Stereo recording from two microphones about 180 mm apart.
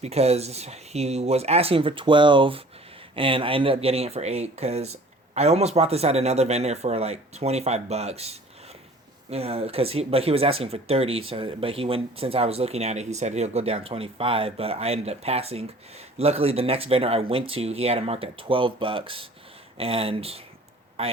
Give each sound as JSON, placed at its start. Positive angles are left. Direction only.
{"t": 0.0, "sound": "speech", "side_deg": -35}